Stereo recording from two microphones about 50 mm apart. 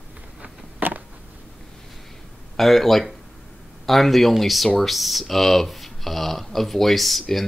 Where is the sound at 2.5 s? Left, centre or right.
Centre.